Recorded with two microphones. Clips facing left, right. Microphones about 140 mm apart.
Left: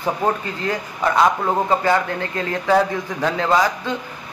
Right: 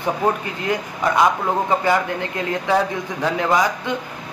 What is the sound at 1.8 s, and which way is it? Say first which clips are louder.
Speech: even; 15° right (ahead or behind).